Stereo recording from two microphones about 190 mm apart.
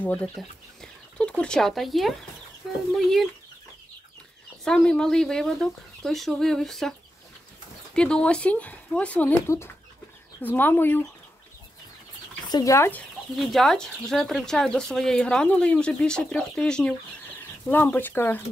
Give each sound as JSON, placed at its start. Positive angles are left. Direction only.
{"t": 0.0, "sound": "speech", "side_deg": 5}
{"t": 4.6, "sound": "speech", "side_deg": 5}
{"t": 12.4, "sound": "speech", "side_deg": 20}
{"t": 13.4, "sound": "speech", "side_deg": 0}